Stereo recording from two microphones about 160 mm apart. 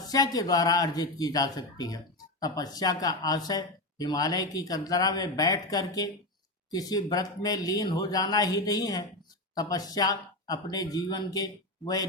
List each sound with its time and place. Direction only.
0.0 s speech: 25° left (ahead or behind)